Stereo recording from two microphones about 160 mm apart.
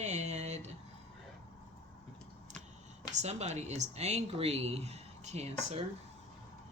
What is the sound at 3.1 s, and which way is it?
Speech, 45° right (ahead or behind).